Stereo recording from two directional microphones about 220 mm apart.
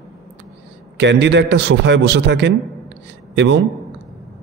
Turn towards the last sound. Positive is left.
turn(degrees=-55)  # may be behind; listen again after turning